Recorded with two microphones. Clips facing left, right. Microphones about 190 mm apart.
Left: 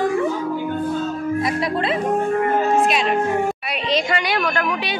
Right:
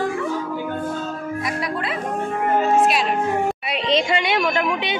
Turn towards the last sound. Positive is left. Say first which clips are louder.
# right 1 dB
turn(degrees=-20)  # may be behind; listen again after turning